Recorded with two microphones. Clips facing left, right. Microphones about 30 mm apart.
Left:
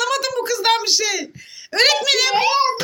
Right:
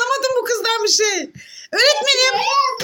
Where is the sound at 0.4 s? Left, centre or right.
Left.